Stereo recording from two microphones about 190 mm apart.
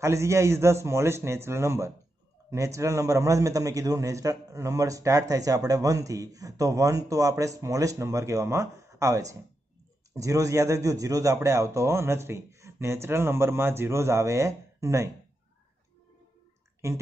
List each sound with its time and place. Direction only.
0.0 s a man's voice: 15° right (ahead or behind)
16.8 s a man's voice: 15° right (ahead or behind)